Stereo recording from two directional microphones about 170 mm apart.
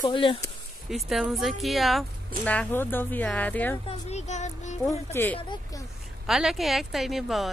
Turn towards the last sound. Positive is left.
turn(degrees=0)  # may be behind; listen again after turning